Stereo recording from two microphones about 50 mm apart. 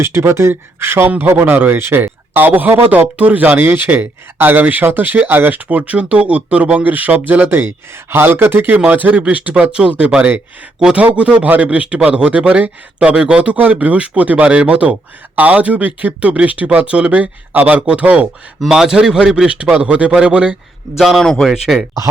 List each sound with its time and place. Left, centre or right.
0.0 s speech: right
1.0 s speech: right
7.4 s speech: right
8.8 s speech: right
9.6 s speech: centre
18.7 s a man's voice: centre
20.9 s a man's voice: centre
21.4 s a man's voice: centre